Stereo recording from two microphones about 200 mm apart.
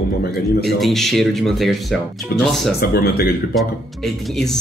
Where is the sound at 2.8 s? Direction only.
50° left (ahead or behind).